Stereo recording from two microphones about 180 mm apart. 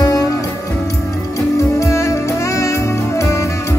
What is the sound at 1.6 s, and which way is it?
Music, 15° left (ahead or behind).